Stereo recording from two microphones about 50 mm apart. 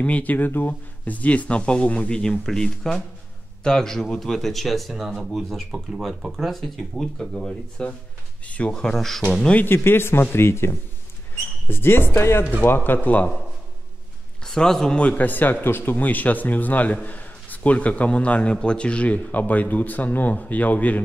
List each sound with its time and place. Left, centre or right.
0.0 s speech: left; by 6.5 s centre
6.5 s speech: centre
8.5 s speech: left
8.7 s speech: centre
9.7 s speech: left
12.6 s speech: left
14.4 s a man's voice: centre
15.0 s speech: left